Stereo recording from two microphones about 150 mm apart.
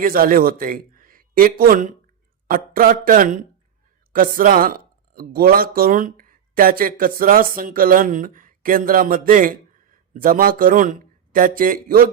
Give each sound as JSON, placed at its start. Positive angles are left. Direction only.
{"t": 0.0, "sound": "speech", "side_deg": -75}